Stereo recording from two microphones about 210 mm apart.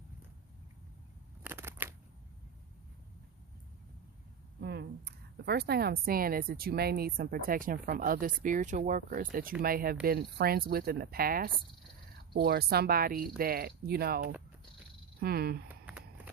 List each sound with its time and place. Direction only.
1.5 s shuffling cards: 10° right (ahead or behind)
4.6 s a woman's voice: 50° right (ahead or behind)
15.7 s a sound: 5° right (ahead or behind)